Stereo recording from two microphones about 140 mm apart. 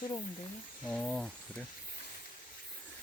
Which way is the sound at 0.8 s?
5° left (ahead or behind).